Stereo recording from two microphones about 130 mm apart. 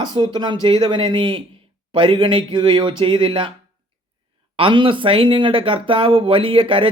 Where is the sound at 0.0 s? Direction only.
35° right (ahead or behind).